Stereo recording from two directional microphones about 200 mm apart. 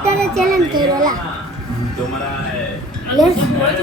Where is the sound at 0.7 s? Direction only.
20° right (ahead or behind).